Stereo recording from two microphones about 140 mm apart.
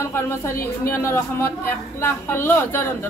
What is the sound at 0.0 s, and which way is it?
A woman's voice, 20° left (ahead or behind).